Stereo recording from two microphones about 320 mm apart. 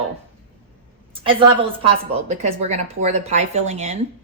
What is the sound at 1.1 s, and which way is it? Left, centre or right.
A woman's voice, centre.